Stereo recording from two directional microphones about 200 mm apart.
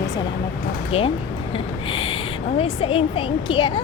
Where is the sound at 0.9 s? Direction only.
30° left (ahead or behind).